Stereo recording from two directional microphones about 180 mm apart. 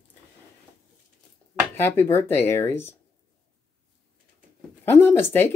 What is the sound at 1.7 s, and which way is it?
Speech, 15° left (ahead or behind).